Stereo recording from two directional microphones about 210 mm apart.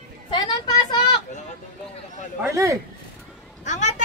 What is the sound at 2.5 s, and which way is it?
Speech, 15° right (ahead or behind).